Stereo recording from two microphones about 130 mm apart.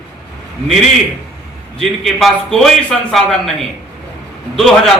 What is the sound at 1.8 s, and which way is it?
A man's voice, centre (ahead or behind).